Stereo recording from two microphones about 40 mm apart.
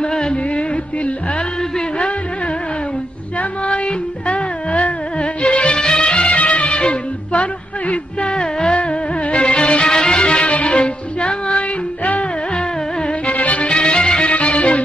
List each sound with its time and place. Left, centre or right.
0.0 s a sound: left
3.3 s music: left
12.0 s music: left
13.3 s music: left